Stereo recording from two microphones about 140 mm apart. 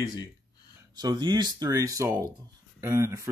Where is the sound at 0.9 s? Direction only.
30° right (ahead or behind).